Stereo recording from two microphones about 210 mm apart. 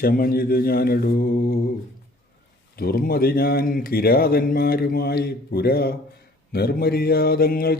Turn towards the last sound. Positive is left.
turn(degrees=45)  # may be behind; listen again after turning